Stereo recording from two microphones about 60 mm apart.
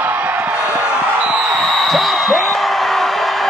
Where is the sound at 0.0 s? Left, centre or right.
Right.